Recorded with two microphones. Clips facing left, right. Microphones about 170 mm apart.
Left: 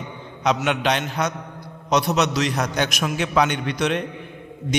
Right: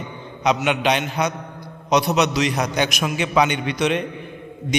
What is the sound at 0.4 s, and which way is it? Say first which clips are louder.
A man's voice: right 2 dB; centre (ahead or behind).